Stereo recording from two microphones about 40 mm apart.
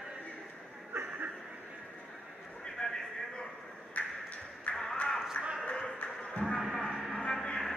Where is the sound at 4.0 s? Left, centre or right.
Left.